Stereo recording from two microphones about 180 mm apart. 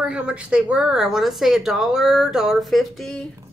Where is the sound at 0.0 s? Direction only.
5° right (ahead or behind).